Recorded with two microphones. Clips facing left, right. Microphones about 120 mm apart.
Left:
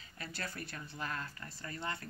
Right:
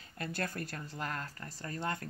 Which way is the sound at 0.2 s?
50° right (ahead or behind).